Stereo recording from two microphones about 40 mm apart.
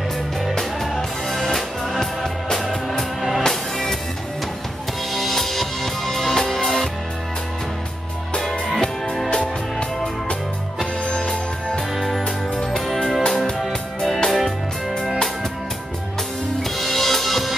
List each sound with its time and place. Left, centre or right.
0.6 s music: centre
5.1 s music: centre
9.3 s music: left
11.9 s music: centre
16.7 s drum: centre